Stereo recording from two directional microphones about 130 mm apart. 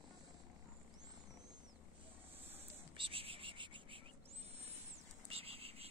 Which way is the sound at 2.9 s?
45° right (ahead or behind).